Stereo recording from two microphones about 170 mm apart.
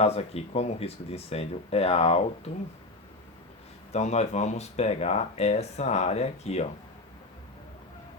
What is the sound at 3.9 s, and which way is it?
Speech, 40° left (ahead or behind).